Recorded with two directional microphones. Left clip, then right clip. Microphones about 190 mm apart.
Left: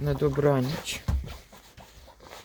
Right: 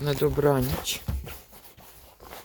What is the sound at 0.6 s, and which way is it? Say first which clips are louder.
Speech: right 1 dB; 35° right (ahead or behind).